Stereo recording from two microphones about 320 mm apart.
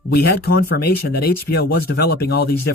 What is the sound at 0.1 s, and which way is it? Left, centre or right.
Speech, left.